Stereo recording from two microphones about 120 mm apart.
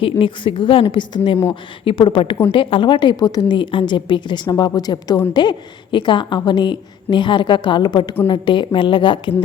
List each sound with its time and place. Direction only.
0.0 s a woman's voice: 45° left (ahead or behind)